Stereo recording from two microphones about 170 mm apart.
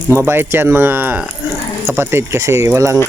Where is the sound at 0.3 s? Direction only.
15° right (ahead or behind).